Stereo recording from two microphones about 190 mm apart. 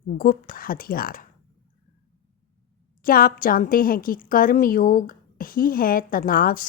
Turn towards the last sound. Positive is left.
turn(degrees=45)  # may be behind; listen again after turning